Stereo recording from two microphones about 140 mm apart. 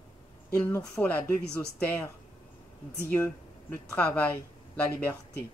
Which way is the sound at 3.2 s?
10° left (ahead or behind).